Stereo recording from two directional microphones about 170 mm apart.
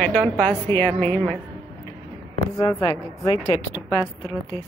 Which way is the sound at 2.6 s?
20° left (ahead or behind).